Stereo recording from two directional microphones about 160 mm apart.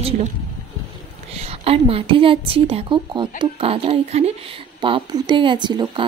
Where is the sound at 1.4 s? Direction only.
40° right (ahead or behind).